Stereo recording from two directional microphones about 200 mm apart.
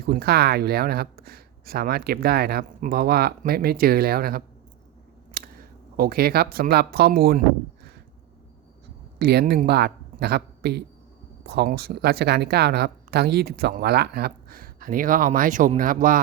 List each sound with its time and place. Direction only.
0.0 s a woman's voice: 50° right (ahead or behind)
9.1 s a woman's voice: 50° right (ahead or behind)